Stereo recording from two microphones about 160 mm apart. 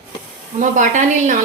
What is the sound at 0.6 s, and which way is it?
Speech, 50° right (ahead or behind).